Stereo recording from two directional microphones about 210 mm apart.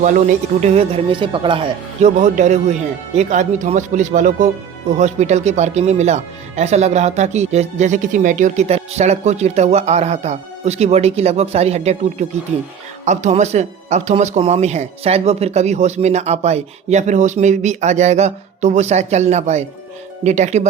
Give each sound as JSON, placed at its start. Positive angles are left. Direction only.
{"t": 0.0, "sound": "speech", "side_deg": -35}
{"t": 13.1, "sound": "speech", "side_deg": -35}